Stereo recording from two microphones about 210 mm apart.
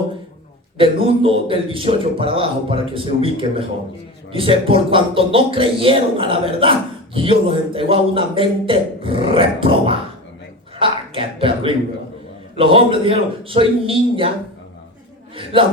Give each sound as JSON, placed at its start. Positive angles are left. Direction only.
{"t": 0.8, "sound": "speech", "side_deg": -25}
{"t": 15.5, "sound": "speech", "side_deg": -25}